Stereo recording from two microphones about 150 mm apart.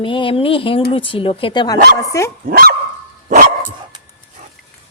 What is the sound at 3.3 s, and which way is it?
Dog, 55° right (ahead or behind).